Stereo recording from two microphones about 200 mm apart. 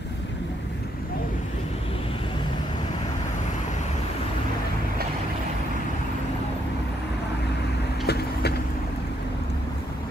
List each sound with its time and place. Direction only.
8.1 s vehicle: 55° left (ahead or behind)